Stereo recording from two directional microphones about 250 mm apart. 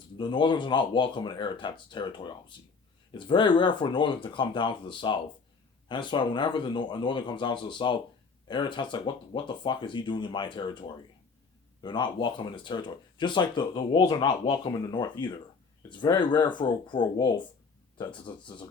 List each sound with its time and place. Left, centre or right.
0.2 s speech: centre